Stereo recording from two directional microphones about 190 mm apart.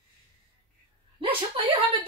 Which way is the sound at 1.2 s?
30° right (ahead or behind).